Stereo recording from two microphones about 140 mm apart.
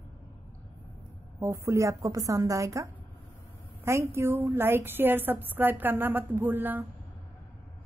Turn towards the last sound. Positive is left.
turn(degrees=-15)  # may be behind; listen again after turning